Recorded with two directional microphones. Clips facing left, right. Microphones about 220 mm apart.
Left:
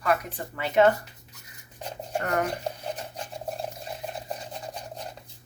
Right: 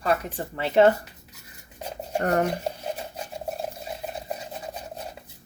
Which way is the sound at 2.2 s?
35° right (ahead or behind).